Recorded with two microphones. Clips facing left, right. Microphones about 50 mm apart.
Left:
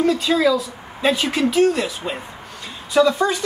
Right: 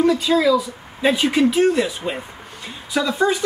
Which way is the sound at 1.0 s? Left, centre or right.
Centre.